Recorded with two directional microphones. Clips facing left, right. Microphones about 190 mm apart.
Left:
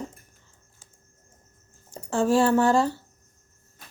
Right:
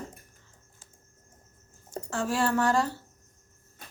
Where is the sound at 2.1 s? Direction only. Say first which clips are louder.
Left 7 dB; 25° left (ahead or behind).